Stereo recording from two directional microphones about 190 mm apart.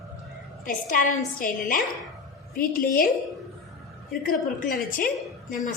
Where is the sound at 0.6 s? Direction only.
45° left (ahead or behind).